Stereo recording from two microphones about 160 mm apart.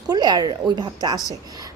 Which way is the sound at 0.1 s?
25° right (ahead or behind).